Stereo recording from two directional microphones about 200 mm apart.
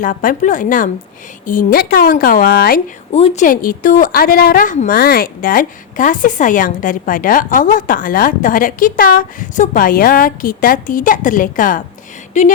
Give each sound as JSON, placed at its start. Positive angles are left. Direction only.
{"t": 0.0, "sound": "a woman's voice", "side_deg": 40}
{"t": 3.2, "sound": "a woman's voice", "side_deg": 35}
{"t": 12.3, "sound": "a sound", "side_deg": 35}